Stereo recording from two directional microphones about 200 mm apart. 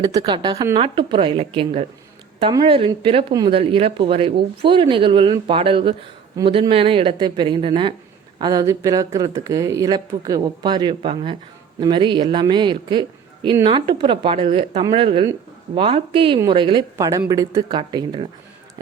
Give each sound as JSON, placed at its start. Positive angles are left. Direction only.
{"t": 0.0, "sound": "a woman's voice", "side_deg": -20}